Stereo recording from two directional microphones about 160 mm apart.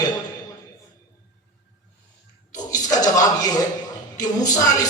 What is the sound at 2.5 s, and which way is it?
A man's voice, 25° left (ahead or behind).